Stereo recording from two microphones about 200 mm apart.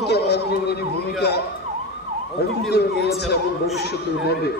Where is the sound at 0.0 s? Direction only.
55° left (ahead or behind).